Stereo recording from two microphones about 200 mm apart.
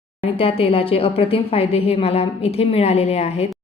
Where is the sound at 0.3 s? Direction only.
30° left (ahead or behind).